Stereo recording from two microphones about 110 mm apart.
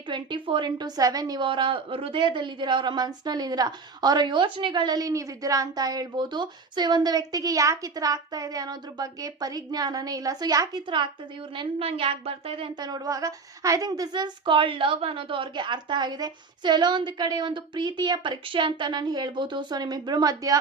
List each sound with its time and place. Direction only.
0.1 s a woman's voice: 45° right (ahead or behind)
1.5 s a woman's voice: 50° right (ahead or behind)
12.8 s a woman's voice: 35° right (ahead or behind)